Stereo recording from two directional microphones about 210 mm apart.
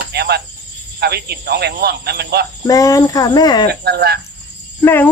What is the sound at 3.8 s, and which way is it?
Speech, 50° right (ahead or behind).